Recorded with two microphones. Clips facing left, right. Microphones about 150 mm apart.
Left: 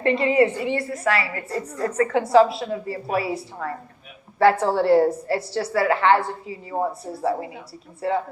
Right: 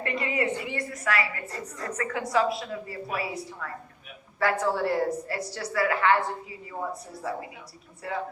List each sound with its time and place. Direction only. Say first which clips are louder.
0.0 s a woman's voice: left 10 dB; 30° left (ahead or behind)
8.0 s a woman's voice: left 10 dB; 30° left (ahead or behind)